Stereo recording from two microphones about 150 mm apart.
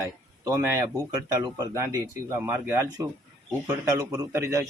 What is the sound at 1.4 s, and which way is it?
Speech, 25° right (ahead or behind).